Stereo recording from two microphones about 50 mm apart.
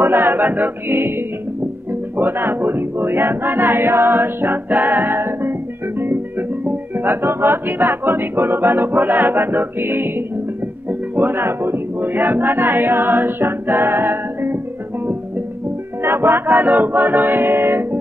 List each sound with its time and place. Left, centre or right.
0.0 s music: right
10.9 s speech: right
16.0 s music: right